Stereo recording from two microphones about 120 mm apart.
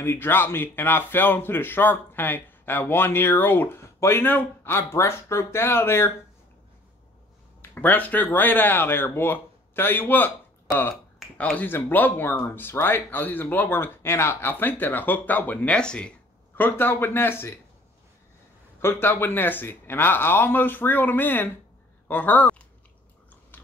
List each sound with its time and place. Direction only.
0.0 s speech: 20° left (ahead or behind)
7.6 s speech: 15° left (ahead or behind)
18.8 s speech: 20° left (ahead or behind)